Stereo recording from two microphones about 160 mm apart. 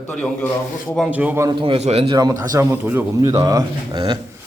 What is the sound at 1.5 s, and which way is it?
Speech, 30° right (ahead or behind).